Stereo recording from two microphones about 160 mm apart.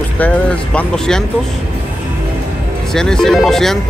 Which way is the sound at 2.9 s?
5° left (ahead or behind).